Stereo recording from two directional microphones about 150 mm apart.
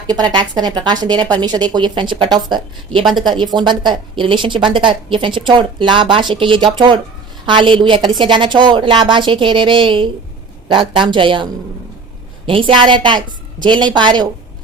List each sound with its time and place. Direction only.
0.1 s a woman's voice: 30° right (ahead or behind)
12.5 s speech: 35° right (ahead or behind)